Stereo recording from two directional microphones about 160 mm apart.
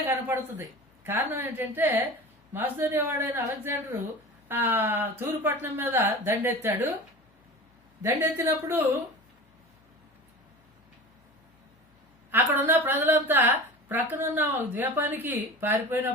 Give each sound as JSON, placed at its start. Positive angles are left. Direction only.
{"t": 0.0, "sound": "a woman's voice", "side_deg": -15}
{"t": 8.0, "sound": "a woman's voice", "side_deg": -15}
{"t": 12.3, "sound": "a woman's voice", "side_deg": -15}